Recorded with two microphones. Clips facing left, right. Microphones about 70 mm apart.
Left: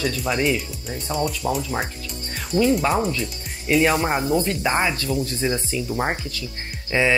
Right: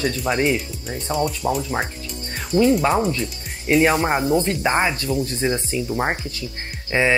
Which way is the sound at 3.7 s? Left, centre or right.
Right.